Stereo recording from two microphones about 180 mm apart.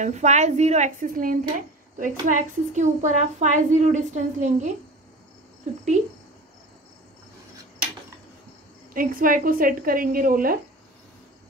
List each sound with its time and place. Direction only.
0.0 s a woman's voice: 40° right (ahead or behind)
8.9 s speech: 50° right (ahead or behind)